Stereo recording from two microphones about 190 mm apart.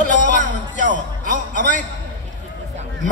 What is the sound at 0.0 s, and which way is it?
Music, 45° left (ahead or behind).